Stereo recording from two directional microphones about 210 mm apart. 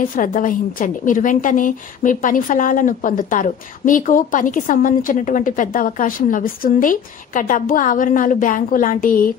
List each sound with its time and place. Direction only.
0.0 s a woman's voice: 40° left (ahead or behind)